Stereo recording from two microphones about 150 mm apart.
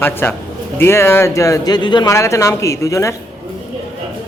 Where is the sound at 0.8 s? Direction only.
15° left (ahead or behind).